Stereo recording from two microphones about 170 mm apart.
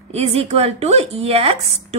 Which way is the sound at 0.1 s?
40° right (ahead or behind).